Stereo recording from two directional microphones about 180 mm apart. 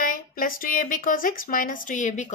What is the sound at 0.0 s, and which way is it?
A woman's voice, 50° left (ahead or behind).